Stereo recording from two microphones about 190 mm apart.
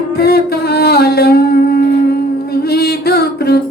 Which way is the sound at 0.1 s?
55° left (ahead or behind).